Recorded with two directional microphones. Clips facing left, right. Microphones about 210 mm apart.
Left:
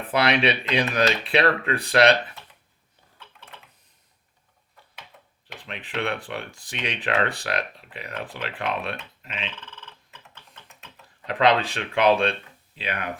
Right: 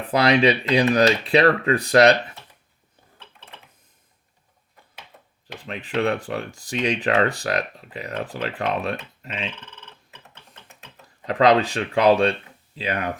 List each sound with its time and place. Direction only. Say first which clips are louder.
0.1 s speech: right 4 dB; 40° right (ahead or behind)
5.6 s speech: right 6 dB; 40° right (ahead or behind)
11.3 s speech: right 4 dB; 40° right (ahead or behind)